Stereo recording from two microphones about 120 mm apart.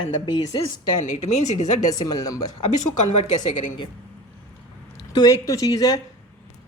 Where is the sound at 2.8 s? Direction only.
80° left.